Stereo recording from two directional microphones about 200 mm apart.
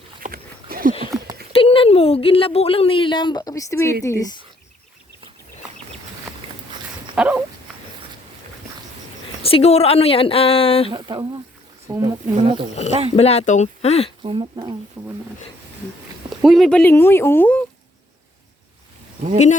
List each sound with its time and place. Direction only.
0.2 s dog: 45° right (ahead or behind)
1.5 s speech: 30° left (ahead or behind)
7.2 s dog: 5° right (ahead or behind)
9.4 s speech: 30° left (ahead or behind)
10.9 s speech: 20° right (ahead or behind)
12.4 s speech: 25° right (ahead or behind)
13.1 s speech: 30° left (ahead or behind)
14.2 s speech: 25° right (ahead or behind)
16.3 s speech: centre (ahead or behind)